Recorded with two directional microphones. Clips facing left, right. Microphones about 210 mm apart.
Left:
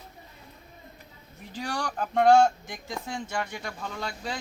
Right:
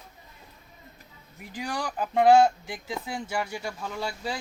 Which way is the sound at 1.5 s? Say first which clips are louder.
Even; 5° right (ahead or behind).